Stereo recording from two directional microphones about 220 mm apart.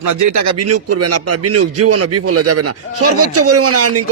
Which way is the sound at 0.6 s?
90° right.